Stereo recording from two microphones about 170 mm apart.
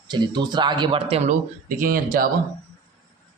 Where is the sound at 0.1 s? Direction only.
25° right (ahead or behind).